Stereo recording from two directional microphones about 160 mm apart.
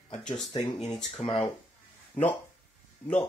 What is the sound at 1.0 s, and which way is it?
Speech, 40° left (ahead or behind).